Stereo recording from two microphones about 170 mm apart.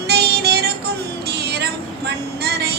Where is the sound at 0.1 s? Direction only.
70° right (ahead or behind).